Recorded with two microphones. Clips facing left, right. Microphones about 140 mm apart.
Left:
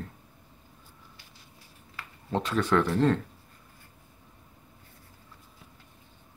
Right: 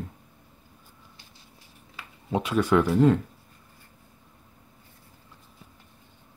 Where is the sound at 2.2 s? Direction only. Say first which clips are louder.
Right 3 dB; 10° right (ahead or behind).